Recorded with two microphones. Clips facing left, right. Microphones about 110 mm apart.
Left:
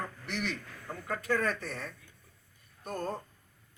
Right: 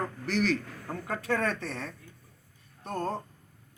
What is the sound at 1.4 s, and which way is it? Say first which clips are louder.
Speech: right 2 dB; 30° right (ahead or behind).